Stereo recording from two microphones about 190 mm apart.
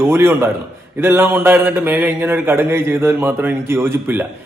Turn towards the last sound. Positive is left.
turn(degrees=-10)  # may be behind; listen again after turning